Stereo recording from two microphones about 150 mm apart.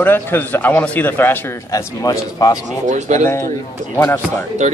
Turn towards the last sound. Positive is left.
turn(degrees=-45)  # may be behind; listen again after turning